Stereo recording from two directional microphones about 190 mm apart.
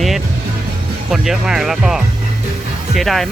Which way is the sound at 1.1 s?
Centre (ahead or behind).